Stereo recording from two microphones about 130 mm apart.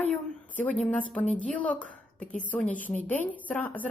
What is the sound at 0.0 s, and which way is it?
A woman's voice, 15° left (ahead or behind).